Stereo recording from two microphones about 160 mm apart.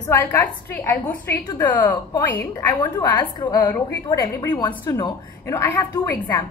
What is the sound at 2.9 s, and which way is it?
A woman's voice, 25° left (ahead or behind).